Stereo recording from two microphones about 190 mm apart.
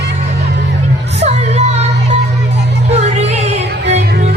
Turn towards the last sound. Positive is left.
turn(degrees=-35)  # may be behind; listen again after turning